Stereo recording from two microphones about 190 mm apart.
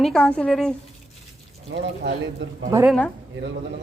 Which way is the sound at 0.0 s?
5° left (ahead or behind).